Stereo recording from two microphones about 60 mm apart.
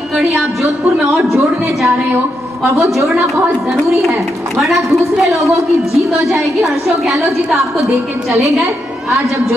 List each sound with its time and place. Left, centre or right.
0.2 s a woman's voice: centre
4.1 s a woman's voice: centre
8.3 s a woman's voice: right